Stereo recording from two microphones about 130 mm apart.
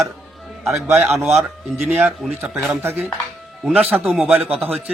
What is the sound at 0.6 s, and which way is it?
A man's voice, centre (ahead or behind).